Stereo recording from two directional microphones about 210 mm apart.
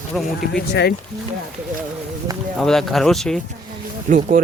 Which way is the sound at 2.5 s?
Centre (ahead or behind).